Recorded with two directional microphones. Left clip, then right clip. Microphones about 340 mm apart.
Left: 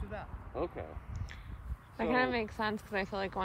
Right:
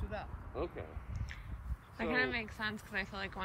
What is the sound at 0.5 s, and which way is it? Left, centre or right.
Speech, left.